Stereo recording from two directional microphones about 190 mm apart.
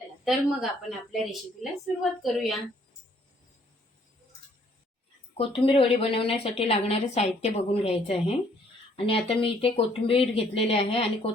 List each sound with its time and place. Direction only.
0.3 s a woman's voice: centre (ahead or behind)
5.4 s a woman's voice: 30° left (ahead or behind)